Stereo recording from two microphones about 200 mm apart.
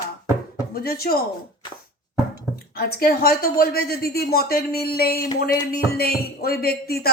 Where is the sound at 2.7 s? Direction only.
50° left (ahead or behind).